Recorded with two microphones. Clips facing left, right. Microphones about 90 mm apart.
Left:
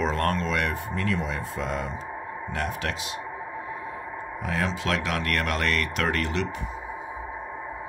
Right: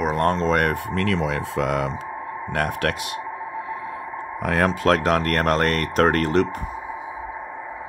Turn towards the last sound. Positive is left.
turn(degrees=-45)  # may be behind; listen again after turning